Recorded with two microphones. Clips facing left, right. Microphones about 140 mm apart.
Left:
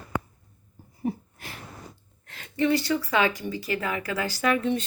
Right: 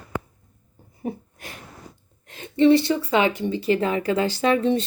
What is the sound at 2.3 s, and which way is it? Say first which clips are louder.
Speech: right 8 dB; 25° right (ahead or behind).